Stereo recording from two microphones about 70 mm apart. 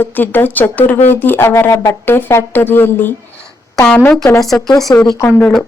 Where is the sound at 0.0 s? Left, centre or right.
Left.